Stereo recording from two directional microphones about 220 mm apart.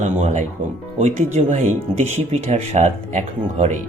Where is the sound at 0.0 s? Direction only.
30° right (ahead or behind).